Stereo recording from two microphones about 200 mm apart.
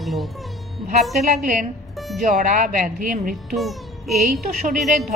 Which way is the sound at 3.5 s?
Centre (ahead or behind).